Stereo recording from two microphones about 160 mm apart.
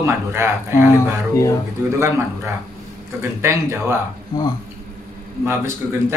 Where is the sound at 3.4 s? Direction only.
15° right (ahead or behind).